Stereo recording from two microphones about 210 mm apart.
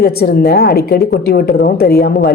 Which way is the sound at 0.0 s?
45° left (ahead or behind).